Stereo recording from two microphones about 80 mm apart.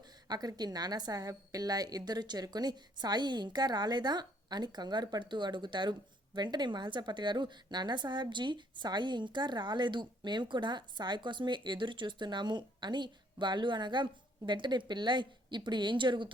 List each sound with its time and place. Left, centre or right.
0.3 s a woman's voice: right